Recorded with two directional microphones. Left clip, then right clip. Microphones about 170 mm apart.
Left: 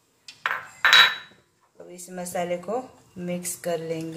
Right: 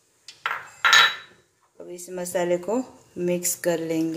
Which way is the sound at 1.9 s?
55° right (ahead or behind).